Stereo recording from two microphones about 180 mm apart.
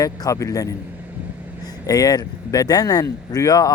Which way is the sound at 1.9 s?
20° left (ahead or behind).